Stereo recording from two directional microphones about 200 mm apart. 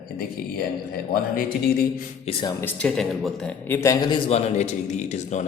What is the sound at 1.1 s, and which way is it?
Speech, 45° left (ahead or behind).